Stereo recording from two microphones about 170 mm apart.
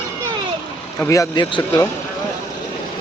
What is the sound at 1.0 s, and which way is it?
Speech, 20° left (ahead or behind).